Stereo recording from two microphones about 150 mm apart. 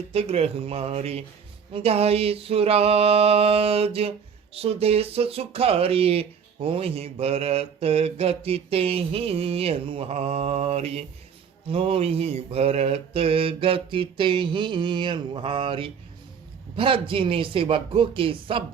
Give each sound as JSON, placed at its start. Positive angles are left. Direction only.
{"t": 0.1, "sound": "speech", "side_deg": -40}